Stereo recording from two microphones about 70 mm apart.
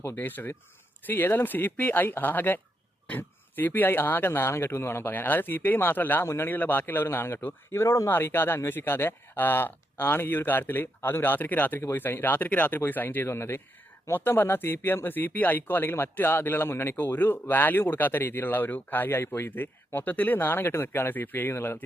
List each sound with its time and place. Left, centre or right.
0.2 s speech: left
6.2 s speech: left
6.5 s speech: left
8.1 s speech: left